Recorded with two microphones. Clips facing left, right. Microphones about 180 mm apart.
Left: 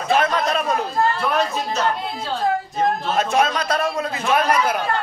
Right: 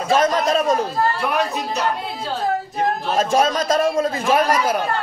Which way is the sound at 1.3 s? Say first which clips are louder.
Even; 15° right (ahead or behind).